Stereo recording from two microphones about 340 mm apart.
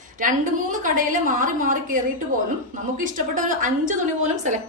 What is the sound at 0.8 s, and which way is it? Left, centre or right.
A woman's voice, right.